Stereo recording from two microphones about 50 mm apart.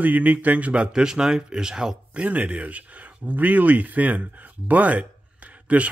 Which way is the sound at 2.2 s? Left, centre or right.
Right.